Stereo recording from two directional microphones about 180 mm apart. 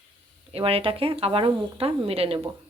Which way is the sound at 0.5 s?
30° right (ahead or behind).